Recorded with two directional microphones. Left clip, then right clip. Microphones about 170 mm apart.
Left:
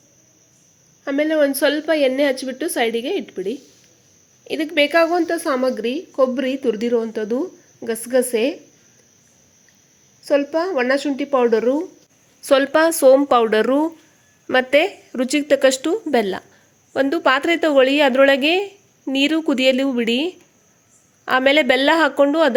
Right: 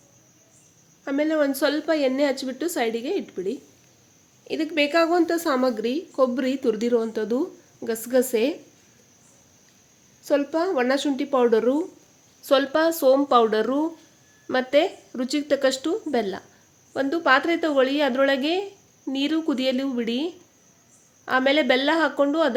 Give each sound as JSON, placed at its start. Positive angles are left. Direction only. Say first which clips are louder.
{"t": 1.0, "sound": "a woman's voice", "louder": "left 5 dB", "side_deg": 20}
{"t": 10.2, "sound": "a woman's voice", "louder": "left 4 dB", "side_deg": 10}